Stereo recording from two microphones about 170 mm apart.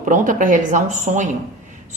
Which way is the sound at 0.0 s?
50° right (ahead or behind).